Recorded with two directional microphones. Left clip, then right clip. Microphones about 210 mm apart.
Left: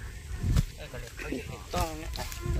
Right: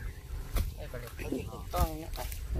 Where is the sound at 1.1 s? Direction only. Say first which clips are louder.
Left 1 dB; centre (ahead or behind).